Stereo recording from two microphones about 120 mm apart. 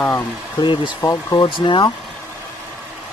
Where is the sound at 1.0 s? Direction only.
30° left (ahead or behind).